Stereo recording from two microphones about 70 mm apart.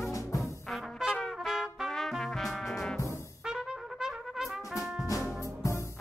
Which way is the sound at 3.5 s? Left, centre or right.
Centre.